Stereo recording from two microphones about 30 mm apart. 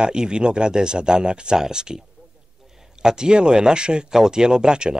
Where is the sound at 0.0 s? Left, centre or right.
Right.